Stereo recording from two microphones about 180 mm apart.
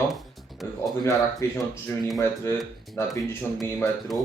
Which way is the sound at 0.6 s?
Centre (ahead or behind).